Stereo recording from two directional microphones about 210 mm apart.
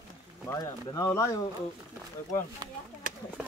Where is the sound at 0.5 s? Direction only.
15° left (ahead or behind).